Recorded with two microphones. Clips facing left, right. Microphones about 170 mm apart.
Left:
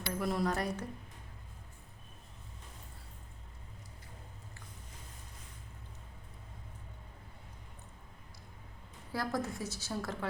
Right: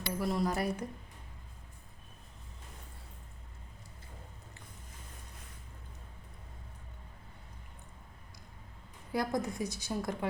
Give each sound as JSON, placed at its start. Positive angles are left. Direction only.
{"t": 0.1, "sound": "a woman's voice", "side_deg": 0}
{"t": 9.1, "sound": "a woman's voice", "side_deg": -15}